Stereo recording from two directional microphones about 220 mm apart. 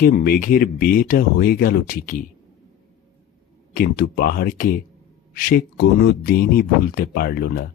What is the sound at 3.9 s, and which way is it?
Speech, 40° left (ahead or behind).